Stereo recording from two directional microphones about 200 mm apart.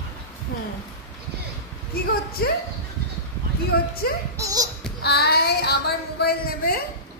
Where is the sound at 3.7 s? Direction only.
50° left (ahead or behind).